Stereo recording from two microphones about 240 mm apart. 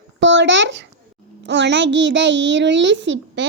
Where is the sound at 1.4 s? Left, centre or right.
Right.